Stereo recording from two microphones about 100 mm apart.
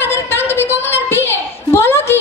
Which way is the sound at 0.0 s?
20° left (ahead or behind).